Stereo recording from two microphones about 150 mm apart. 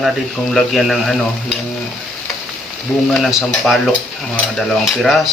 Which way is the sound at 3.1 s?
Centre (ahead or behind).